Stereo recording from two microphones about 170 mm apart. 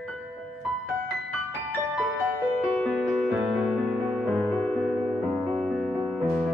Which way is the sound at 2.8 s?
Centre (ahead or behind).